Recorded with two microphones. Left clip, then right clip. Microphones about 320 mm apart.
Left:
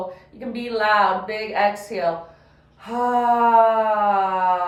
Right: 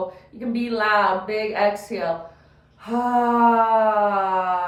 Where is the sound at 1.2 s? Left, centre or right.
Centre.